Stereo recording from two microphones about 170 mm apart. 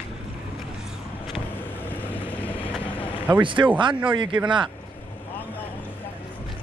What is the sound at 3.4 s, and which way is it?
Speech, 30° right (ahead or behind).